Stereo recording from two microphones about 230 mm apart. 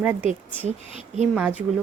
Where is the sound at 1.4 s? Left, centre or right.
Centre.